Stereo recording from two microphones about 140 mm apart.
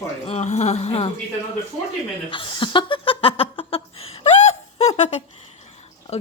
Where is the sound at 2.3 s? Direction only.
35° left (ahead or behind).